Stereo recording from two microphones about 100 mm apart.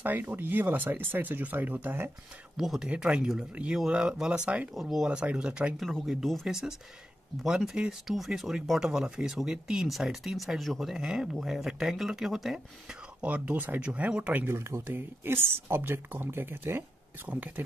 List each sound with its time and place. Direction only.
0.0 s speech: 20° right (ahead or behind)
2.5 s speech: 5° right (ahead or behind)
5.9 s speech: centre (ahead or behind); by 17.6 s 15° right (ahead or behind)